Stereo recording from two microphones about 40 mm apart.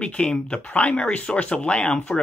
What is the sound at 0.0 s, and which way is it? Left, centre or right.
Speech, left.